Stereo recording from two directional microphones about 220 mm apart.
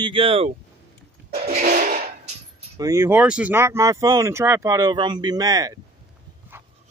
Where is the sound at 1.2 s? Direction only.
40° right (ahead or behind).